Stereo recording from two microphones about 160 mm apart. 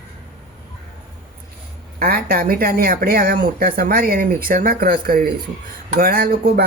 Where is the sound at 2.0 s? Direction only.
70° right (ahead or behind).